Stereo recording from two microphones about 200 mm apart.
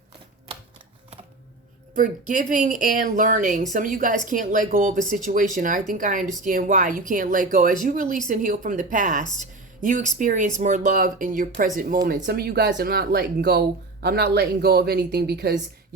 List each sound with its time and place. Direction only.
2.0 s speech: 40° right (ahead or behind)